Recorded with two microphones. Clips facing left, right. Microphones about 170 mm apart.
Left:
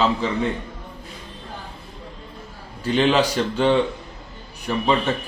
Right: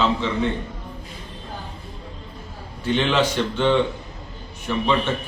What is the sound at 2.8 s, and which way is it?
Speech, 35° left (ahead or behind).